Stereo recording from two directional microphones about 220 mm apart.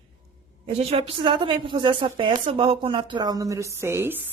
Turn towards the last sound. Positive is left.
turn(degrees=-10)  # may be behind; listen again after turning